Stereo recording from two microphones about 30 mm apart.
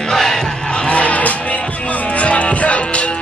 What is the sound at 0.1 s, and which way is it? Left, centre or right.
Battle cry, centre.